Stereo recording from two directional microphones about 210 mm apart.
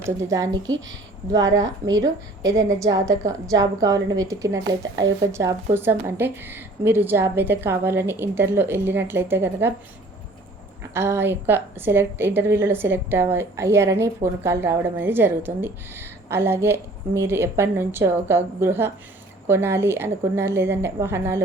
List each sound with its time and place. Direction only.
0.0 s a woman's voice: 15° right (ahead or behind)
10.9 s a woman's voice: 10° right (ahead or behind)